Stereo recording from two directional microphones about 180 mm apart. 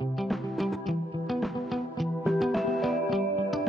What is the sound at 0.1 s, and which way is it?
Music, centre (ahead or behind).